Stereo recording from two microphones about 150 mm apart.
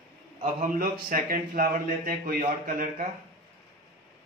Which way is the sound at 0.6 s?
70° right (ahead or behind).